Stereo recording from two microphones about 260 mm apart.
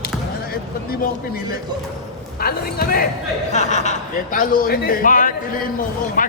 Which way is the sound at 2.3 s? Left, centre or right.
Left.